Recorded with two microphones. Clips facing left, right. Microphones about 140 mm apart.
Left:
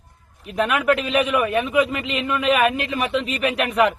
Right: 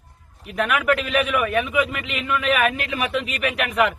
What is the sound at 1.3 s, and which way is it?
Speech, 30° left (ahead or behind).